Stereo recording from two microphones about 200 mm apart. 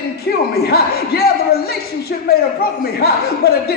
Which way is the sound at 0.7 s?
50° left (ahead or behind).